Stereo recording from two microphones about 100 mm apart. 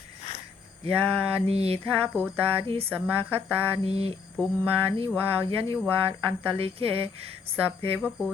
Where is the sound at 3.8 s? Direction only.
80° right.